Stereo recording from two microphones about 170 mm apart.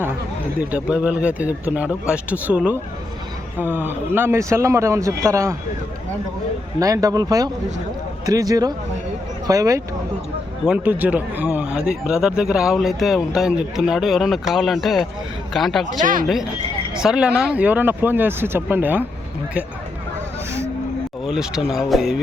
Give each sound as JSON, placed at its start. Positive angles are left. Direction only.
{"t": 0.7, "sound": "speech", "side_deg": -5}
{"t": 6.7, "sound": "speech", "side_deg": -20}
{"t": 15.9, "sound": "speech", "side_deg": -50}
{"t": 16.2, "sound": "speech", "side_deg": 0}
{"t": 21.2, "sound": "speech", "side_deg": -5}